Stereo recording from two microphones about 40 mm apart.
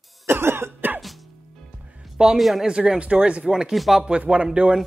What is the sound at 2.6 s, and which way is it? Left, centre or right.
Speech, right.